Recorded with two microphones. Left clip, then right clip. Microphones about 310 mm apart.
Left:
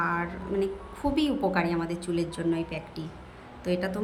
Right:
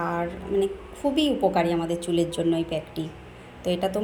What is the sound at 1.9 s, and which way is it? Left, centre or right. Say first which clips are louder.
A woman's voice: right 6 dB; centre.